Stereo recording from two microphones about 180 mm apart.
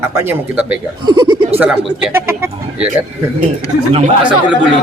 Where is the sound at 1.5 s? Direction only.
10° right (ahead or behind).